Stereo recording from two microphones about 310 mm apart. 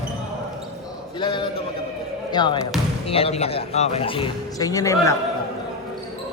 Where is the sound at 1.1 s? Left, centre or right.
Centre.